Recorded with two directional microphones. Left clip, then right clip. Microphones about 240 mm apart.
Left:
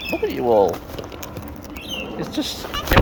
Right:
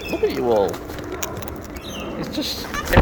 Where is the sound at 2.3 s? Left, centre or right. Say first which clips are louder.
Right 1 dB; left.